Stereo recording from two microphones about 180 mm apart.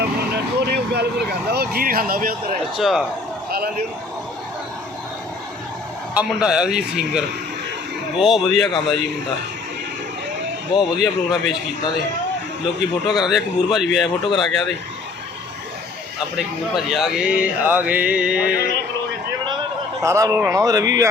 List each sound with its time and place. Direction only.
0.9 s speech: 65° right (ahead or behind)
2.7 s a man's voice: centre (ahead or behind)
6.1 s a man's voice: 5° right (ahead or behind)
10.8 s a man's voice: centre (ahead or behind)
13.1 s a man's voice: centre (ahead or behind)
16.7 s a man's voice: centre (ahead or behind)
18.5 s speech: 60° left (ahead or behind)
20.0 s speech: 15° right (ahead or behind)